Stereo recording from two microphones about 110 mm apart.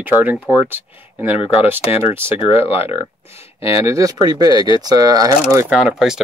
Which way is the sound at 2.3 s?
55° left (ahead or behind).